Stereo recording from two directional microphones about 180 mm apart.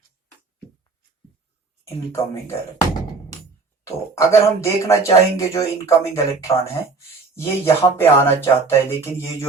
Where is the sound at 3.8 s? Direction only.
15° left (ahead or behind).